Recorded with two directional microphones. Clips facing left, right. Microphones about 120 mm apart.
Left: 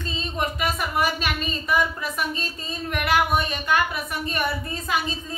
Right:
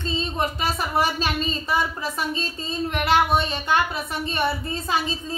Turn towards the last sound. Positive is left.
turn(degrees=-30)  # may be behind; listen again after turning